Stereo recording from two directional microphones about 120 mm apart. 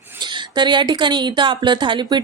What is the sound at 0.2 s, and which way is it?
Speech, 40° right (ahead or behind).